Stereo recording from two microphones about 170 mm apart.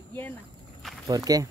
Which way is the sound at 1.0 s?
20° right (ahead or behind).